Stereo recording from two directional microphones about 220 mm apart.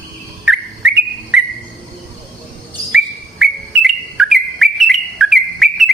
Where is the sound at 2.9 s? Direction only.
5° right (ahead or behind).